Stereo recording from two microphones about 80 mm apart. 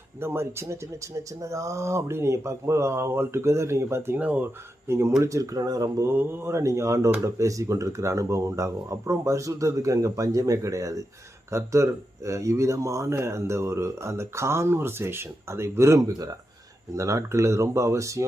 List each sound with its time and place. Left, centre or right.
0.2 s speech: right
4.2 s speech: centre
4.9 s speech: right
6.1 s speech: right